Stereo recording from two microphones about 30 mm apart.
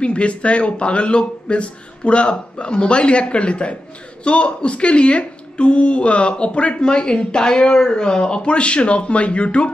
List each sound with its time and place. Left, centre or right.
0.0 s speech: left
6.8 s speech: left